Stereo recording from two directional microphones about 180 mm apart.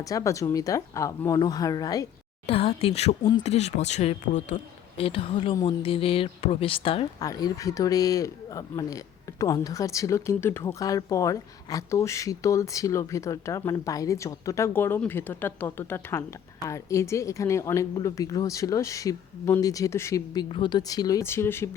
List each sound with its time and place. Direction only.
0.0 s speech: 20° left (ahead or behind)
2.5 s speech: 35° left (ahead or behind)
7.2 s speech: 20° left (ahead or behind)